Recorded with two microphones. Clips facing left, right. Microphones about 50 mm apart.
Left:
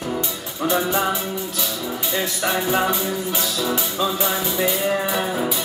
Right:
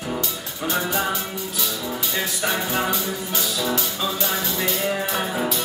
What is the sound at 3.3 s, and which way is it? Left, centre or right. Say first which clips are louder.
Music: left 1 dB; centre.